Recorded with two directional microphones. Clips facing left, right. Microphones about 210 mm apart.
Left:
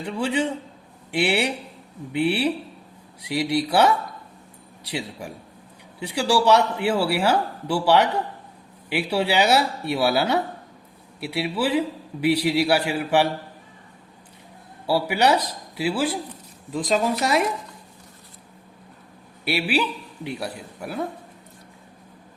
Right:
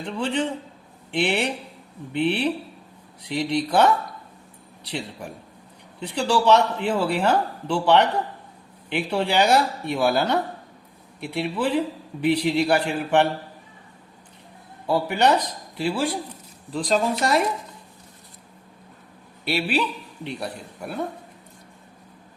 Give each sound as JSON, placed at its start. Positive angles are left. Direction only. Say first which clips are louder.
{"t": 0.0, "sound": "speech", "louder": "left 1 dB", "side_deg": 10}
{"t": 14.8, "sound": "a man's voice", "louder": "even", "side_deg": 5}
{"t": 19.5, "sound": "a man's voice", "louder": "left 1 dB", "side_deg": 10}